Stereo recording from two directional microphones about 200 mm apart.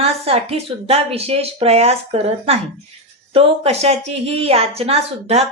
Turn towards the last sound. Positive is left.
turn(degrees=-30)  # may be behind; listen again after turning